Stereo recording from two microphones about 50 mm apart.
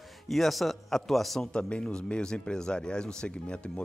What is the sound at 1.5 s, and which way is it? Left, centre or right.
Speech, centre.